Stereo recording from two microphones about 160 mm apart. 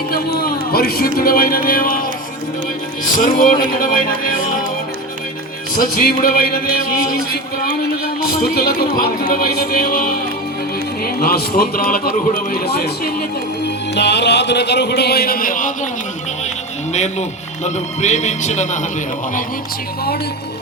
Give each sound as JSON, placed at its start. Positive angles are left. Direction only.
{"t": 0.1, "sound": "speech", "side_deg": 70}
{"t": 3.2, "sound": "speech", "side_deg": 60}
{"t": 6.1, "sound": "speech", "side_deg": 70}
{"t": 7.8, "sound": "speech", "side_deg": 70}
{"t": 13.9, "sound": "music", "side_deg": 90}
{"t": 16.9, "sound": "speech", "side_deg": 45}